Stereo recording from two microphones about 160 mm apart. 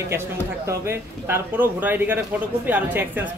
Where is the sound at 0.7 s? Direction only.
15° right (ahead or behind).